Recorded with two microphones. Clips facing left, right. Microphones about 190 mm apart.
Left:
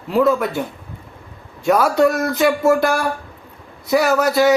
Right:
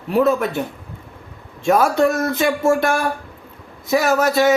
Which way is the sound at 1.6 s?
25° right (ahead or behind).